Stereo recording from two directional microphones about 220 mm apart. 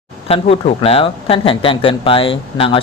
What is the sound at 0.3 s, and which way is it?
Speech, 25° left (ahead or behind).